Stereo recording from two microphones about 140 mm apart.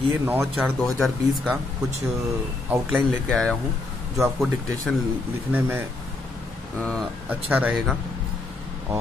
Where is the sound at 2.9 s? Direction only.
5° left (ahead or behind).